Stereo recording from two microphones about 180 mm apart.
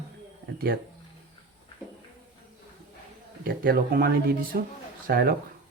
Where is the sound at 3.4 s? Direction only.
55° right (ahead or behind).